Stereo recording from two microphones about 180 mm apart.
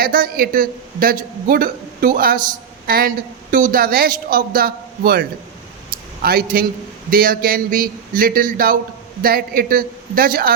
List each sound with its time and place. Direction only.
0.0 s a man's voice: 55° right (ahead or behind)
6.2 s a man's voice: 55° right (ahead or behind)